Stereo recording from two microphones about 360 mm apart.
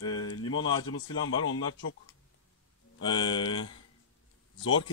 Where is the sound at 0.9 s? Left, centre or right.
Left.